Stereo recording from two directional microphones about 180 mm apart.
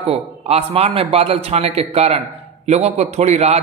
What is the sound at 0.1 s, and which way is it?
A man's voice, 35° right (ahead or behind).